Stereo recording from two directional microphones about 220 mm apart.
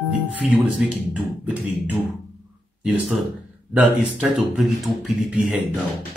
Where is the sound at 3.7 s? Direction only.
5° right (ahead or behind).